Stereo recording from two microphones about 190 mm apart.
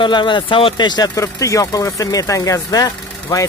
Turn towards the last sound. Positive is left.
turn(degrees=20)  # may be behind; listen again after turning